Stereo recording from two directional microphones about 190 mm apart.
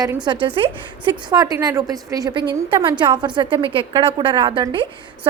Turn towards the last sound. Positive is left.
turn(degrees=-25)  # may be behind; listen again after turning